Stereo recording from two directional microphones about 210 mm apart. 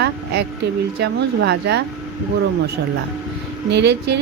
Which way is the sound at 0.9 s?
50° right (ahead or behind).